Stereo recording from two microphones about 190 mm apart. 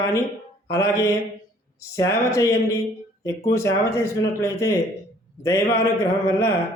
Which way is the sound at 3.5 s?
15° left (ahead or behind).